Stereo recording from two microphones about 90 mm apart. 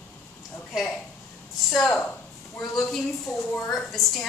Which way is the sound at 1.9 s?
20° left (ahead or behind).